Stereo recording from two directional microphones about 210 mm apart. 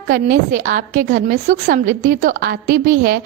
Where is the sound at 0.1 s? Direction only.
40° right (ahead or behind).